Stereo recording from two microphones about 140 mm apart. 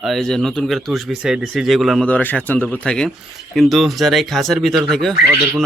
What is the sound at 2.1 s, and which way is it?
Speech, 10° left (ahead or behind).